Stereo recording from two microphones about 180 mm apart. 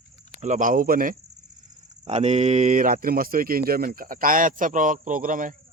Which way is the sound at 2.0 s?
40° right (ahead or behind).